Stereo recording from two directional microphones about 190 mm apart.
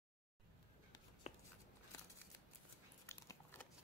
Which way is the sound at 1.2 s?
35° left (ahead or behind).